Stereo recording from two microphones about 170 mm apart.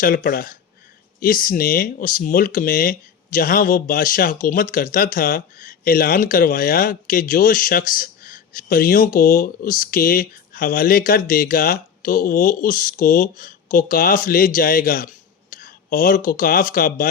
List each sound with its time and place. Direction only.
0.0 s speech: 60° left (ahead or behind)